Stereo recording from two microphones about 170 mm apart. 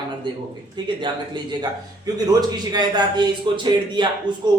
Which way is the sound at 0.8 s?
25° right (ahead or behind).